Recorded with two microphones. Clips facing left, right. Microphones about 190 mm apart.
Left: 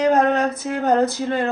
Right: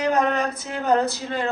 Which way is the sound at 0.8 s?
50° left (ahead or behind).